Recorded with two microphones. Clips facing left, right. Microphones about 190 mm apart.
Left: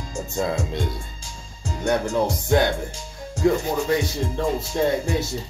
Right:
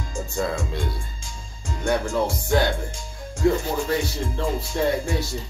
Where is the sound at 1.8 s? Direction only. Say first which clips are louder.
Left 1 dB; 20° left (ahead or behind).